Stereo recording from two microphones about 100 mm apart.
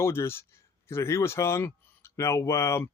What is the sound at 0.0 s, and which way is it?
Speech, 25° left (ahead or behind).